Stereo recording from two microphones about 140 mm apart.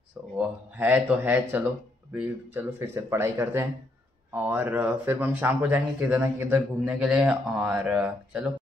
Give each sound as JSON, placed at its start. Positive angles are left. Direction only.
{"t": 0.4, "sound": "speech", "side_deg": -10}
{"t": 7.0, "sound": "speech", "side_deg": -5}